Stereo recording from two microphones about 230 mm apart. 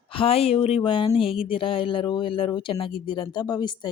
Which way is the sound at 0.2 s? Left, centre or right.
Left.